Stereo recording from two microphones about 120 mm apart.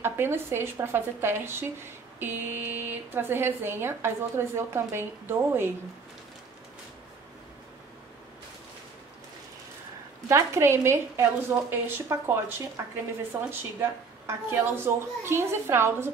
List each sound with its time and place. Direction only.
0.0 s a woman's voice: 20° right (ahead or behind)
10.2 s a woman's voice: 25° right (ahead or behind)